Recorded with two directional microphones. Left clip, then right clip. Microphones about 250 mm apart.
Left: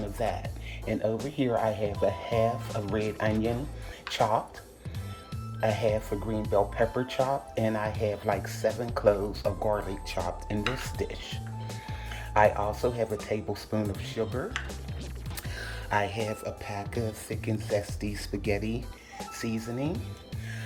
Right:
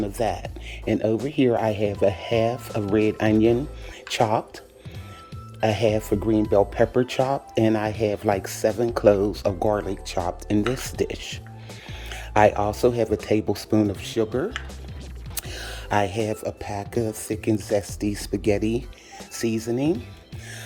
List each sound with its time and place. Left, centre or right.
0.2 s speech: right
1.4 s speech: right
5.5 s speech: right